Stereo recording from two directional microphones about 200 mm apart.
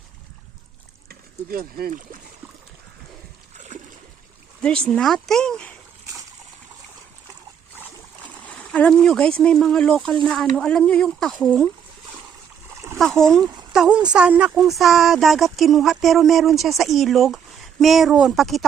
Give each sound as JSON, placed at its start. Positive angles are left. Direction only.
{"t": 1.0, "sound": "speech", "side_deg": -50}
{"t": 4.6, "sound": "speech", "side_deg": 5}
{"t": 8.4, "sound": "speech", "side_deg": 5}
{"t": 13.0, "sound": "speech", "side_deg": 0}